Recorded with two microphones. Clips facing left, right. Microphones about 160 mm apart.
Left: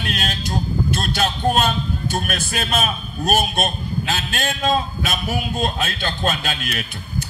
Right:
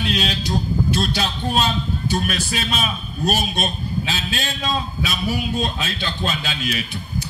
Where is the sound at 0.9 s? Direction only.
50° left (ahead or behind).